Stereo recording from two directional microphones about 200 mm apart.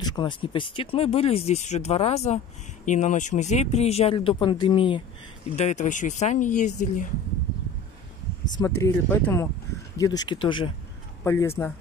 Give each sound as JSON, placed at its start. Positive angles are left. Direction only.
{"t": 0.0, "sound": "speech", "side_deg": 20}
{"t": 5.6, "sound": "speech", "side_deg": 35}
{"t": 8.5, "sound": "speech", "side_deg": 15}
{"t": 11.2, "sound": "speech", "side_deg": 15}